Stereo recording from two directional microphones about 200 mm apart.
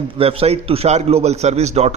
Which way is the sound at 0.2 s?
30° right (ahead or behind).